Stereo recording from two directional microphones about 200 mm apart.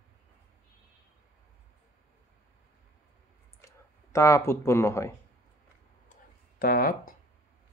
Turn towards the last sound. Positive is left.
turn(degrees=45)  # may be behind; listen again after turning